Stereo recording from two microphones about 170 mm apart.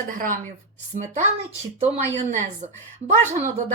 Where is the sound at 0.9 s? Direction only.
45° right (ahead or behind).